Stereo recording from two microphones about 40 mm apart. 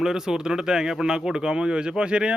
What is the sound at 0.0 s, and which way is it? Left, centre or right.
Speech, centre.